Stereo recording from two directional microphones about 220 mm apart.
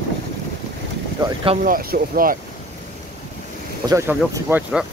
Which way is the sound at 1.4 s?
25° right (ahead or behind).